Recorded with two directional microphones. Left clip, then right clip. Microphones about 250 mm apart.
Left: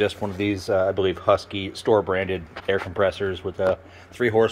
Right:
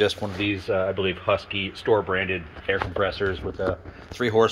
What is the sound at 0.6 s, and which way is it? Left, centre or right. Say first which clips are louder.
Speech: left 4 dB; left.